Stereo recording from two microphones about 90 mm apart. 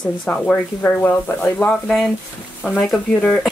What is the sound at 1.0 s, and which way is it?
Speech, 25° left (ahead or behind).